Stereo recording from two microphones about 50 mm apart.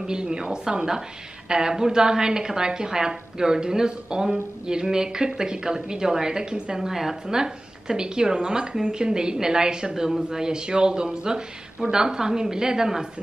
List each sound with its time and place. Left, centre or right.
0.0 s a woman's voice: centre